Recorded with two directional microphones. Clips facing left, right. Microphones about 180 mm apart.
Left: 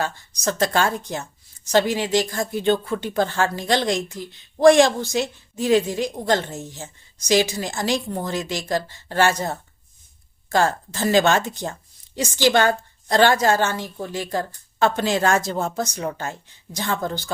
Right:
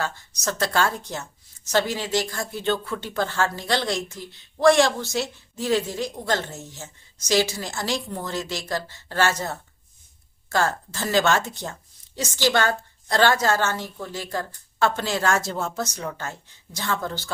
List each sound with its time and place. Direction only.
0.0 s speech: 15° left (ahead or behind)